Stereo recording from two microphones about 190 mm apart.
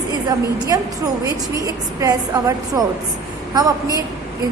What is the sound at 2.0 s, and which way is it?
Speech, 20° right (ahead or behind).